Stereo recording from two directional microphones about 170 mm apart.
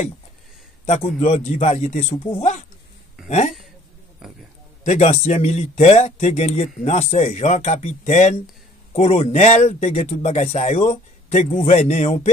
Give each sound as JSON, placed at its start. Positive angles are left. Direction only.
{"t": 0.8, "sound": "speech", "side_deg": 40}
{"t": 4.2, "sound": "a sound", "side_deg": -5}
{"t": 4.8, "sound": "speech", "side_deg": 40}